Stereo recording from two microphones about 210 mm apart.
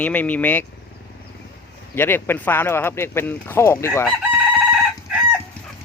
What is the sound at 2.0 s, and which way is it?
Speech, 10° left (ahead or behind).